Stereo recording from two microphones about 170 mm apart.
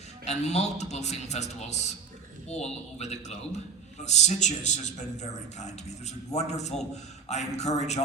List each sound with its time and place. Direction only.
0.3 s a man's voice: 40° left (ahead or behind)